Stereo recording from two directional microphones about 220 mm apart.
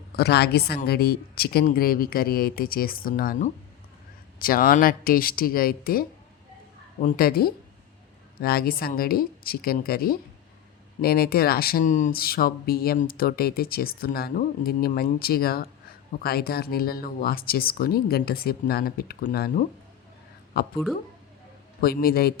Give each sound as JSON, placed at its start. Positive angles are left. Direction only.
{"t": 0.2, "sound": "a woman's voice", "side_deg": 50}
{"t": 21.8, "sound": "speech", "side_deg": 45}